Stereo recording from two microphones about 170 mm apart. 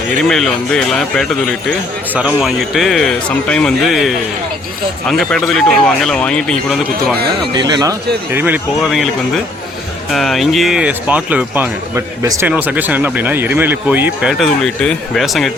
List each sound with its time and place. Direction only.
0.2 s speech: 5° left (ahead or behind)
7.5 s speech: 25° right (ahead or behind)
8.3 s speech: 10° right (ahead or behind)
8.8 s speech: centre (ahead or behind)